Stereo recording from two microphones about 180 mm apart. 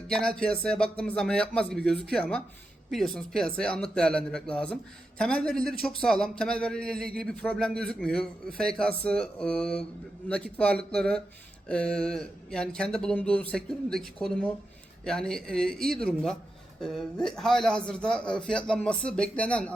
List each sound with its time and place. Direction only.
0.1 s a man's voice: 5° left (ahead or behind)